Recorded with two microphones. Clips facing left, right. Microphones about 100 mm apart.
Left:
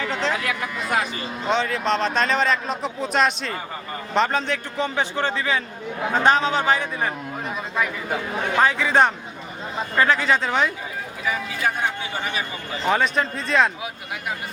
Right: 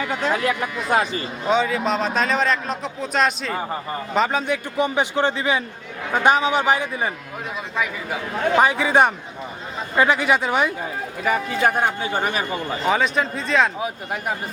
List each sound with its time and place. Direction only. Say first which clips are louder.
0.0 s a man's voice: right 2 dB; 10° right (ahead or behind)
0.3 s speech: right 4 dB; 30° right (ahead or behind)
1.5 s a man's voice: right 2 dB; 5° right (ahead or behind)
8.5 s a man's voice: right 1 dB; 15° right (ahead or behind)
11.2 s a man's voice: right 5 dB; 55° right (ahead or behind)
12.8 s speech: even; centre (ahead or behind)
13.8 s speech: right 5 dB; 40° right (ahead or behind)